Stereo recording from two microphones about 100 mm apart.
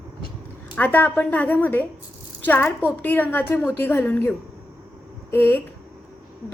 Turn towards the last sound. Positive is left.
turn(degrees=20)  # may be behind; listen again after turning